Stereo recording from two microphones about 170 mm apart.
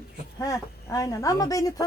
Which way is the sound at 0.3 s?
20° left (ahead or behind).